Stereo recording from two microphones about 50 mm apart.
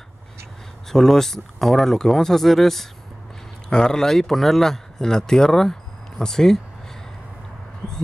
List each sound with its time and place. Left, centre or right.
0.8 s speech: centre